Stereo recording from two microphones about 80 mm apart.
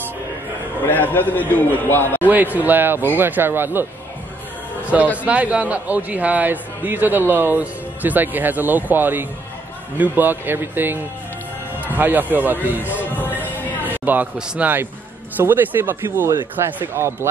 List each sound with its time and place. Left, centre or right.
0.8 s a man's voice: left
2.2 s a man's voice: right
4.9 s a man's voice: centre
13.7 s a sound: right
14.5 s a man's voice: right